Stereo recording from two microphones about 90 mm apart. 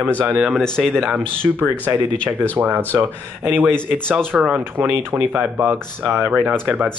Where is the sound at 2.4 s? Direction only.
20° right (ahead or behind).